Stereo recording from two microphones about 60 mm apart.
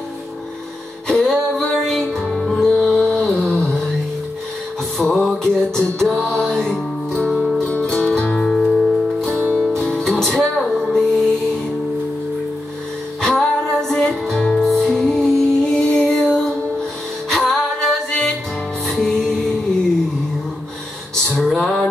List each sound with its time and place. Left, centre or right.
1.0 s music: centre
4.9 s music: centre
7.6 s music: centre
9.4 s music: right
9.7 s music: centre
13.2 s music: centre
14.6 s music: centre
21.2 s music: centre